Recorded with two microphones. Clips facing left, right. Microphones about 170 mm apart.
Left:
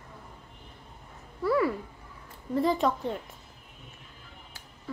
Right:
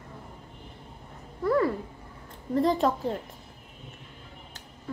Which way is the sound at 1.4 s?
40° right (ahead or behind).